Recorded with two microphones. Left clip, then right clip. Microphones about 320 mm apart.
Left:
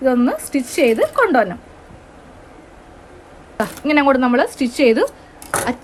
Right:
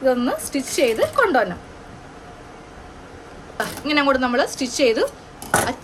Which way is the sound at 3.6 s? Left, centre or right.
Centre.